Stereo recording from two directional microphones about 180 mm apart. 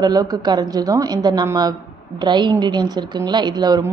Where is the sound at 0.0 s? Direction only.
20° right (ahead or behind).